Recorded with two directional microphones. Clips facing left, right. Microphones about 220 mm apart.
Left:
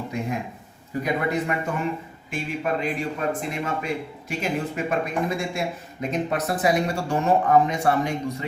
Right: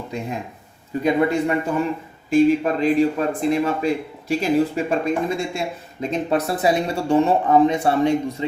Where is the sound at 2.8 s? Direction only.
35° right (ahead or behind).